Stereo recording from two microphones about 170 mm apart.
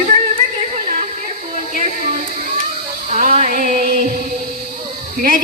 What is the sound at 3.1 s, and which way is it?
Music, 45° right (ahead or behind).